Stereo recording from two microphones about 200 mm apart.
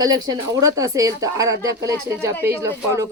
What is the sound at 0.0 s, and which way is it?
Speech, 20° right (ahead or behind).